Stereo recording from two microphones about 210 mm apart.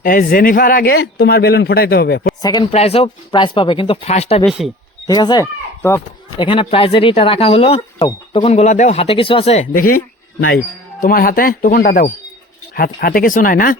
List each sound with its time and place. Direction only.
0.0 s a man's voice: 40° left (ahead or behind)
2.4 s speech: 20° left (ahead or behind)
2.7 s speech: 30° left (ahead or behind)
4.4 s speech: centre (ahead or behind)
5.0 s speech: 20° left (ahead or behind); by 9.9 s 35° left (ahead or behind)
11.0 s a man's voice: 45° left (ahead or behind)